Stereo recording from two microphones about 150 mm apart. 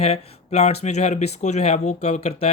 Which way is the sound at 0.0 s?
45° left (ahead or behind).